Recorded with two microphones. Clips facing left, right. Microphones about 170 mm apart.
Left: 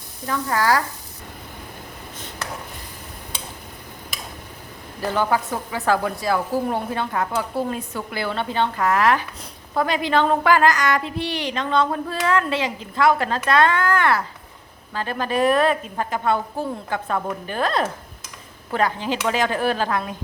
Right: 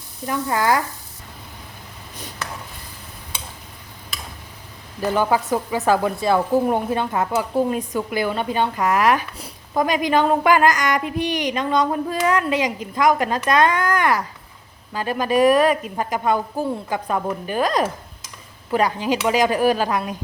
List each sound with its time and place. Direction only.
0.3 s frying: 20° right (ahead or behind)
5.1 s a woman's voice: 15° right (ahead or behind)